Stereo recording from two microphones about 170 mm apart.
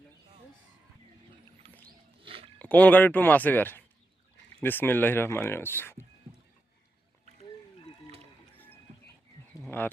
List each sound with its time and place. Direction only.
1.6 s a sound: 35° right (ahead or behind)
2.2 s chewing: 35° right (ahead or behind)
2.6 s speech: 10° left (ahead or behind)
9.6 s speech: 10° left (ahead or behind)